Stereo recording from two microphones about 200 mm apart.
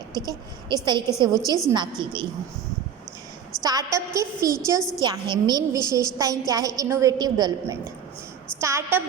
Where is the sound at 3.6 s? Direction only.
20° right (ahead or behind).